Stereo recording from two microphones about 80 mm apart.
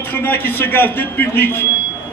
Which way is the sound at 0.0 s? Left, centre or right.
Left.